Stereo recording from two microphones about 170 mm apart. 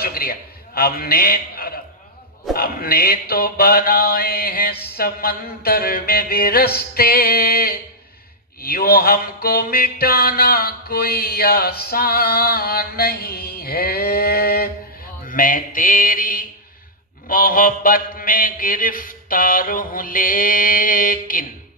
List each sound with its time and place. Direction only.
0.0 s a man's voice: 60° left (ahead or behind)
2.5 s music: 60° left (ahead or behind)
15.2 s mantra: 55° left (ahead or behind)
17.3 s music: 55° left (ahead or behind)